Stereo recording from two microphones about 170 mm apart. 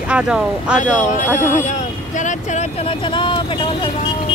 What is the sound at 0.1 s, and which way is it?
Speech, 5° right (ahead or behind).